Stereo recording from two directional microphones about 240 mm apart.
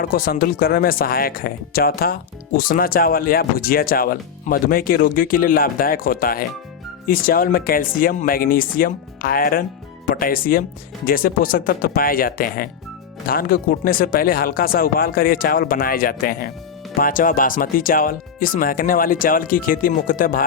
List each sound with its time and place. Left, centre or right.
0.0 s speech: left